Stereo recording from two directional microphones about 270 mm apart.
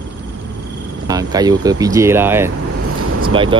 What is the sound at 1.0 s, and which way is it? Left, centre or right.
Speech, centre.